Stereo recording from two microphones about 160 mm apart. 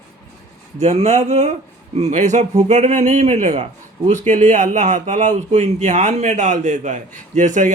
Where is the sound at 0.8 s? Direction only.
40° right (ahead or behind).